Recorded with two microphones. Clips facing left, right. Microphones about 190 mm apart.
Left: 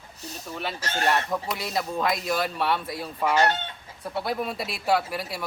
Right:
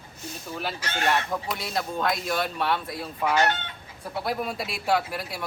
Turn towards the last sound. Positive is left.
turn(degrees=0)  # may be behind; listen again after turning